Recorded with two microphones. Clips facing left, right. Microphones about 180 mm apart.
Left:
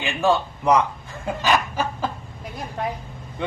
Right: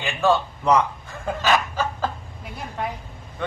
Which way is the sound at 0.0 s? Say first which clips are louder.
Even; 15° left (ahead or behind).